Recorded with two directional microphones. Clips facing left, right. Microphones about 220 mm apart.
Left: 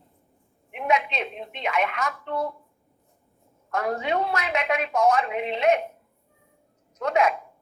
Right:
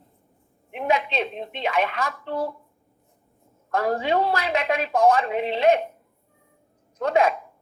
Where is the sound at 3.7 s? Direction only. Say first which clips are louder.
Right 3 dB; 30° right (ahead or behind).